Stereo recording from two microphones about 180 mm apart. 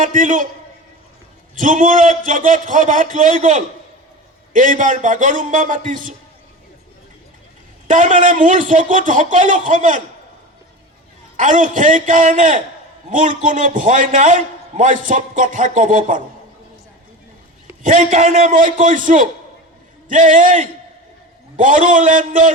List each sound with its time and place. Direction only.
0.0 s a man's voice: 45° right (ahead or behind)
1.5 s a man's voice: 45° right (ahead or behind)
7.9 s a man's voice: 45° right (ahead or behind)
11.3 s a man's voice: 45° right (ahead or behind)
17.8 s a man's voice: 45° right (ahead or behind)